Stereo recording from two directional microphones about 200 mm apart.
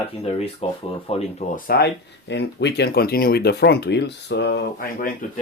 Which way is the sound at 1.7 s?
55° left (ahead or behind).